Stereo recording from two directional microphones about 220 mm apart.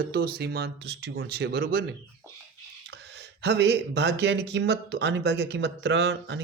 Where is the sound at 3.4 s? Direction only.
50° right (ahead or behind).